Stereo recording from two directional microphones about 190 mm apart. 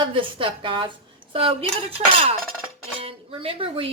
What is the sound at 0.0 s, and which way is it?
Speech, 25° right (ahead or behind).